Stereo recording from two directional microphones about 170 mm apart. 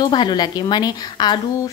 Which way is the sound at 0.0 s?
25° left (ahead or behind).